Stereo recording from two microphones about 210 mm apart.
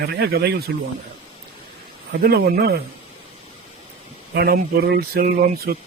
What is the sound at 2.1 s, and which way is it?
Speech, 50° right (ahead or behind).